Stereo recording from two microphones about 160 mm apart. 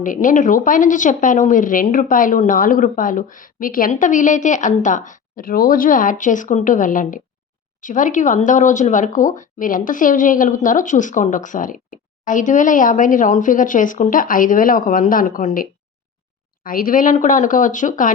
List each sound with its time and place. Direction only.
0.0 s speech: 55° left (ahead or behind)
16.6 s speech: 60° left (ahead or behind)